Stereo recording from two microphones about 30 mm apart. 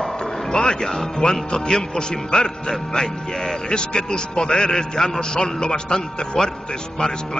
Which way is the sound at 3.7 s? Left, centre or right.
Left.